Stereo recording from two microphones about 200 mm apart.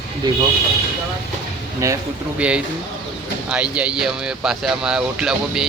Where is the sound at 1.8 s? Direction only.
15° right (ahead or behind).